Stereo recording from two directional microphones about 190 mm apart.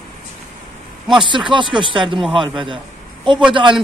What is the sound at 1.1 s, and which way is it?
Speech, 25° right (ahead or behind).